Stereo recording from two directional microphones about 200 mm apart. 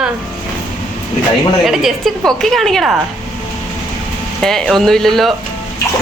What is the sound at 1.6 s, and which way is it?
A woman's voice, centre (ahead or behind).